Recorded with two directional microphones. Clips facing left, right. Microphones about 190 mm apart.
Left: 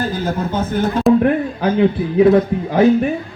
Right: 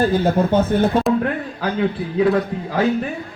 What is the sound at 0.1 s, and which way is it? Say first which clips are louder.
Speech: right 4 dB; 65° right (ahead or behind).